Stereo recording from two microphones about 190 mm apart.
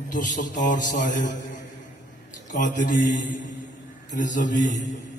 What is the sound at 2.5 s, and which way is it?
Mantra, 50° left (ahead or behind).